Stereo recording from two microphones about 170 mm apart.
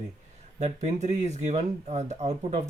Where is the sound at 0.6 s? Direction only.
40° right (ahead or behind).